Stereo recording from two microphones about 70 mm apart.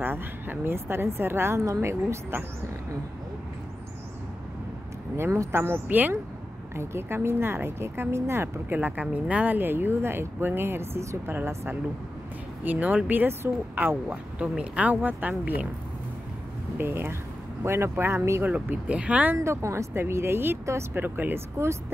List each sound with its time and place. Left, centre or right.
0.0 s speech: right
5.1 s speech: right
6.7 s speech: right
8.7 s speech: right
9.6 s speech: right
12.6 s speech: right
16.7 s speech: right
18.4 s speech: right
19.3 s speech: right